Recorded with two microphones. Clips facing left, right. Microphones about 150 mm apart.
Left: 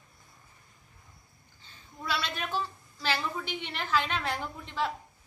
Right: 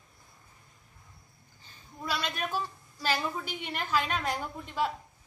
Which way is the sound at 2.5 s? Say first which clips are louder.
Left 1 dB; 10° right (ahead or behind).